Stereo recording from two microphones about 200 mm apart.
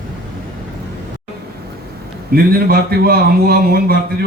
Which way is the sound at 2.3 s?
50° right (ahead or behind).